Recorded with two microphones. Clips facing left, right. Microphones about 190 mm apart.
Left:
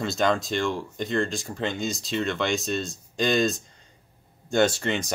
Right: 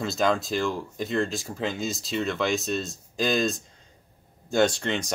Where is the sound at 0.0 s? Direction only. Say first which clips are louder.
Even; centre (ahead or behind).